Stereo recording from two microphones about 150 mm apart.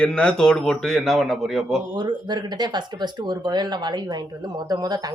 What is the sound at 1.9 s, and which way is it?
Speech, 30° right (ahead or behind).